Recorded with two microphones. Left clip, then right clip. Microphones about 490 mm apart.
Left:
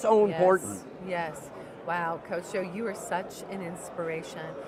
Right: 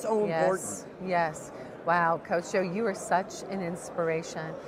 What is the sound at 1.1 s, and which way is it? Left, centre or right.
A woman's voice, right.